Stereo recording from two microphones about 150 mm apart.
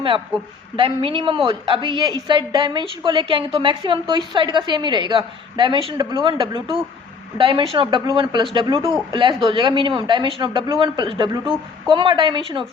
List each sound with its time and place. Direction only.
0.8 s a woman's voice: 35° right (ahead or behind)